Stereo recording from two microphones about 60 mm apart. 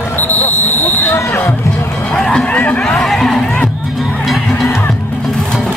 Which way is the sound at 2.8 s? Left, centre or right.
Centre.